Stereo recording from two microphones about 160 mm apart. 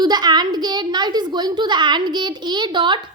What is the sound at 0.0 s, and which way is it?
A woman's voice, 25° right (ahead or behind).